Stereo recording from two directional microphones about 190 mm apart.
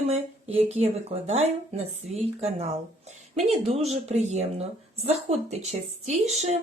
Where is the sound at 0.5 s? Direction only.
35° right (ahead or behind).